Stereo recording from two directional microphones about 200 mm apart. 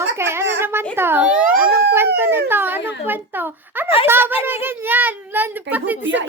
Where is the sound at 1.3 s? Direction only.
45° right (ahead or behind).